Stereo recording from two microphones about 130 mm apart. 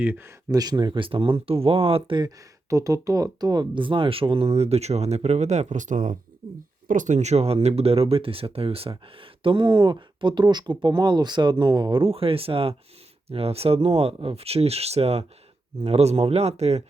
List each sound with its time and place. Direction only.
0.0 s speech: 15° right (ahead or behind)
0.5 s speech: 30° right (ahead or behind)
2.6 s speech: 25° right (ahead or behind); by 16.8 s 55° right (ahead or behind)